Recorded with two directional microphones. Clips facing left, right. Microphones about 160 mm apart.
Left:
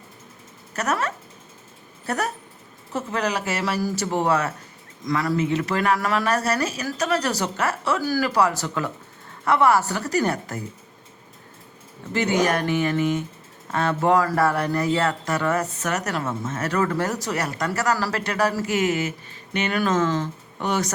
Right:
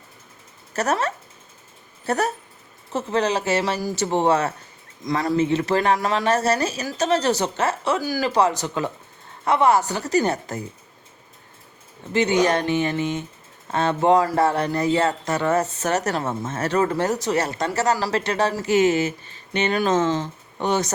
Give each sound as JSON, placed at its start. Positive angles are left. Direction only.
{"t": 0.7, "sound": "speech", "side_deg": -30}
{"t": 12.1, "sound": "speech", "side_deg": -20}